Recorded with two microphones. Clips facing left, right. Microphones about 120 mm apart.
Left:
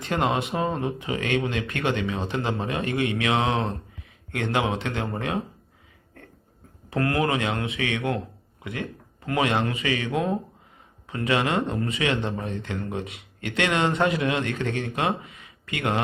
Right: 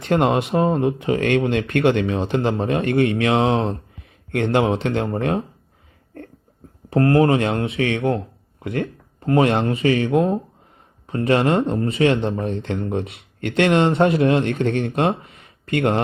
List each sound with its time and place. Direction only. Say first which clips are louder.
0.0 s a man's voice: right 6 dB; 50° right (ahead or behind); by 2.8 s 35° right (ahead or behind)
2.8 s speech: right 7 dB; 55° right (ahead or behind); by 3.8 s 30° right (ahead or behind)
4.5 s a man's voice: right 6 dB; 40° right (ahead or behind)
6.9 s speech: right 8 dB; 35° right (ahead or behind)
8.6 s a man's voice: right 8 dB; 50° right (ahead or behind)
9.2 s a man's voice: right 7 dB; 40° right (ahead or behind)
11.6 s speech: right 8 dB; 30° right (ahead or behind)
12.5 s a man's voice: right 7 dB; 55° right (ahead or behind)
15.3 s a sound: right 10 dB; 50° right (ahead or behind)